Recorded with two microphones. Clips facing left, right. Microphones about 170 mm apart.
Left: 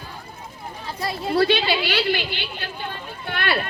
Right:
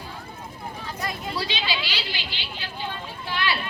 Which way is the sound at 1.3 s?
55° left (ahead or behind).